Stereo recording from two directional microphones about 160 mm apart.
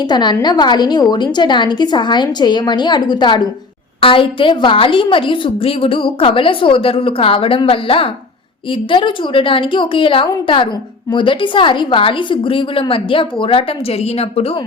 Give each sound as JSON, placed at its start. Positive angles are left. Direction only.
{"t": 0.0, "sound": "a woman's voice", "side_deg": 25}